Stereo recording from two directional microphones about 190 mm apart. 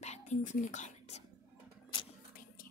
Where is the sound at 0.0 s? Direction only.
35° left (ahead or behind).